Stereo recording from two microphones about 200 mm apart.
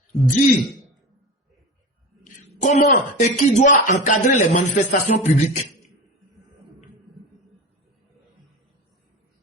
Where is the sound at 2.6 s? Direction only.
35° left (ahead or behind).